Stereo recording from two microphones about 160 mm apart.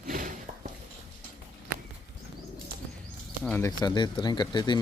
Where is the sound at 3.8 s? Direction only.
30° left (ahead or behind).